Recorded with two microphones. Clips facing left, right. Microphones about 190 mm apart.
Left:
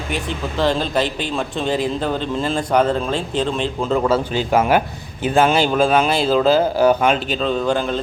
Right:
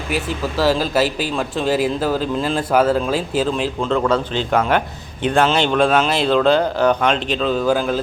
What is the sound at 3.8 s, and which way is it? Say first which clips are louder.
A man's voice: left 1 dB; 5° left (ahead or behind).